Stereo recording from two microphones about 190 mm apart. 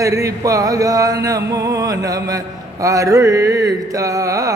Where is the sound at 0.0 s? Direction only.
15° right (ahead or behind).